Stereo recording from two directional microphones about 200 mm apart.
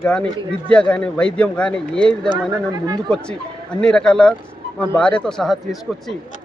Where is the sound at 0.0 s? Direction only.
5° left (ahead or behind).